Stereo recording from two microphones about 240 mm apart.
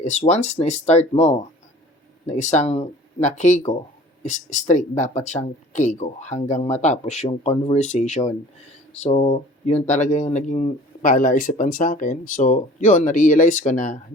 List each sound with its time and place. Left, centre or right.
0.0 s speech: left